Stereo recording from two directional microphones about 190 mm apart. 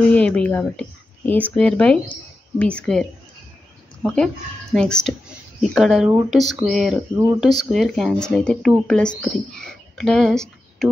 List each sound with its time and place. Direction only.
0.1 s speech: 5° left (ahead or behind)